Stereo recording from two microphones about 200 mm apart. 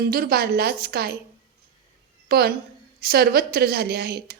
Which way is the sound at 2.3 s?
50° right (ahead or behind).